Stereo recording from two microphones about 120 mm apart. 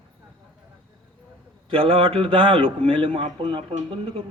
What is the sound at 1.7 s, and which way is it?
A man's voice, 50° right (ahead or behind).